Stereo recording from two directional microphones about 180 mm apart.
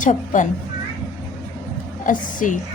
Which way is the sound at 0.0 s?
45° left (ahead or behind).